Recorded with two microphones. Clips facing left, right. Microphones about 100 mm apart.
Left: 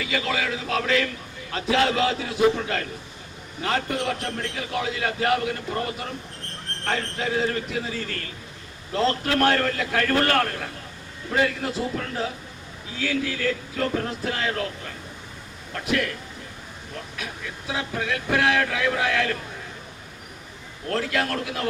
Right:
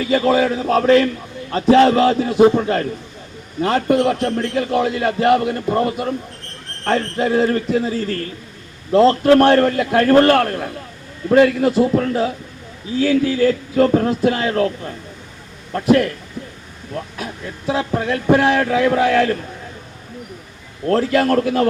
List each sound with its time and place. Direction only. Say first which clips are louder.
0.0 s a man's voice: right 11 dB; 40° right (ahead or behind)
13.0 s a man's voice: right 11 dB; 40° right (ahead or behind)
20.8 s a man's voice: right 10 dB; 40° right (ahead or behind)